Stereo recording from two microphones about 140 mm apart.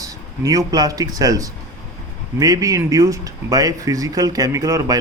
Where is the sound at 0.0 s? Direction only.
25° right (ahead or behind).